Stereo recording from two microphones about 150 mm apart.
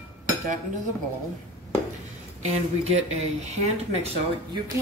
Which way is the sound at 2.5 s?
50° right (ahead or behind).